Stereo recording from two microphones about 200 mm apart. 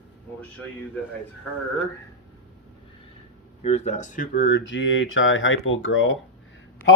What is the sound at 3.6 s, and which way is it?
Speech, 35° left (ahead or behind).